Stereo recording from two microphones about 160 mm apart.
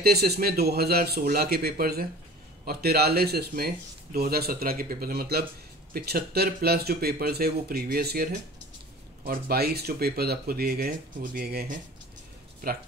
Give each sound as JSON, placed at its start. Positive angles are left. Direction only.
{"t": 0.0, "sound": "speech", "side_deg": -80}